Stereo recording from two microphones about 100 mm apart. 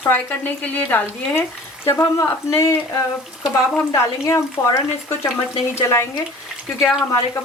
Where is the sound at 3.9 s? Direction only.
30° left (ahead or behind).